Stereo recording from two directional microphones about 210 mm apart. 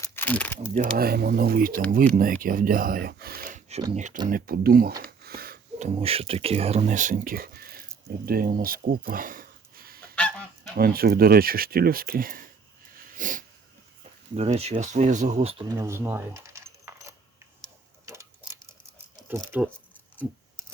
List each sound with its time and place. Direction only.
0.0 s crumpling: 10° left (ahead or behind)
0.7 s speech: 40° right (ahead or behind)
3.9 s speech: 35° right (ahead or behind)
5.2 s a sound: 45° right (ahead or behind)
6.0 s speech: 25° right (ahead or behind); by 7.9 s 45° right (ahead or behind)
8.3 s a sound: 45° right (ahead or behind)
10.2 s goose: 5° left (ahead or behind)
10.8 s speech: 45° right (ahead or behind)
13.1 s a sound: 40° right (ahead or behind)
14.3 s speech: 30° right (ahead or behind)
15.8 s coin: 10° right (ahead or behind)
18.0 s a sound: 15° right (ahead or behind)
19.4 s speech: 10° right (ahead or behind)